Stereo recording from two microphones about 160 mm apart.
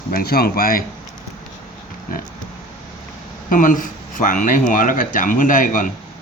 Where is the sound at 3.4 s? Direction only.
55° left (ahead or behind).